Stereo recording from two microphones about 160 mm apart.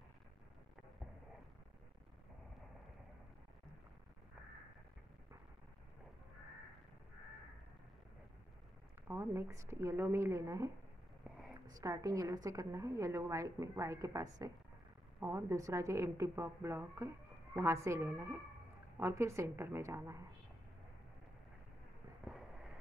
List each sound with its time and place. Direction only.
9.0 s a woman's voice: 15° right (ahead or behind)
11.7 s a woman's voice: 20° right (ahead or behind)